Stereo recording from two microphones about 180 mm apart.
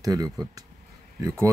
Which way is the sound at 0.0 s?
20° right (ahead or behind).